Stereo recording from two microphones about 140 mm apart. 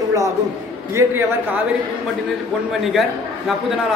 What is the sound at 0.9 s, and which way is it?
Speech, 15° right (ahead or behind).